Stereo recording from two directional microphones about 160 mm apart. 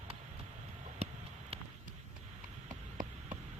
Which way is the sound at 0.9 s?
40° right (ahead or behind).